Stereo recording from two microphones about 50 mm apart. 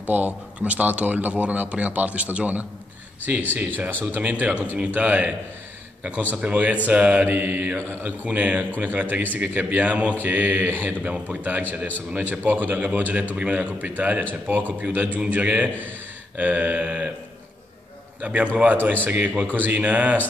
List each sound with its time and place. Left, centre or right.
0.0 s a man's voice: right
6.3 s a man's voice: right
7.2 s a man's voice: right
11.0 s a man's voice: right
12.4 s a man's voice: right
18.2 s a man's voice: right
19.0 s a man's voice: right